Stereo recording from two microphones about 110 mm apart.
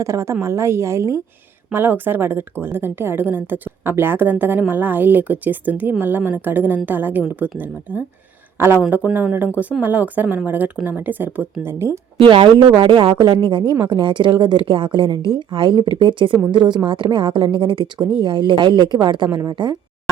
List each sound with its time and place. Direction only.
0.0 s a woman's voice: 25° right (ahead or behind)
12.2 s a woman's voice: 50° right (ahead or behind)